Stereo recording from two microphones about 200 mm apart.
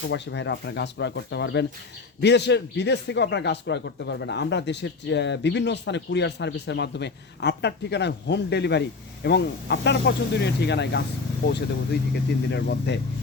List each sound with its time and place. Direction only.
0.1 s speech: 60° left (ahead or behind)
12.1 s speech: 55° left (ahead or behind)